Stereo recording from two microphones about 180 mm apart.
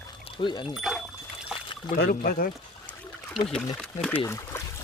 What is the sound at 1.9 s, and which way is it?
Speech, 50° left (ahead or behind).